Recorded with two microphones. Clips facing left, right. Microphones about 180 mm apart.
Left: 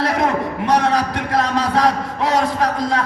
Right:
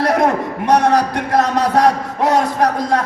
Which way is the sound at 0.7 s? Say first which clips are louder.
Right 4 dB; 45° right (ahead or behind).